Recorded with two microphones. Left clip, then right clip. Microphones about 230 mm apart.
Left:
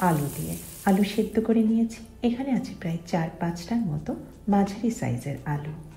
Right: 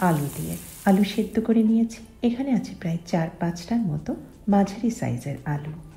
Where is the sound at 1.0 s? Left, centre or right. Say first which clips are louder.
Even; right.